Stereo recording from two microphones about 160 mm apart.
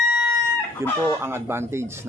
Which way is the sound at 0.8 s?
15° right (ahead or behind).